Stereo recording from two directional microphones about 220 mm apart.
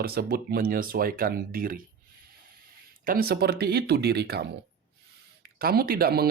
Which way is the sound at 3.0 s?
40° right (ahead or behind).